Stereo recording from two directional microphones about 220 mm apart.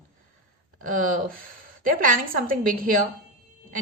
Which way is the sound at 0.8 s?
40° right (ahead or behind).